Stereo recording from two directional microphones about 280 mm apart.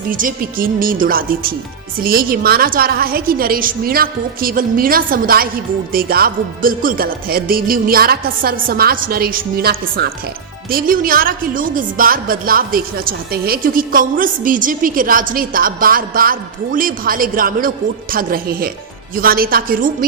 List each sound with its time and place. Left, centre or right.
0.1 s a woman's voice: right